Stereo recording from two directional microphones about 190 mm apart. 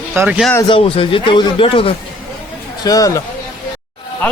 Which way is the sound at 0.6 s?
25° left (ahead or behind).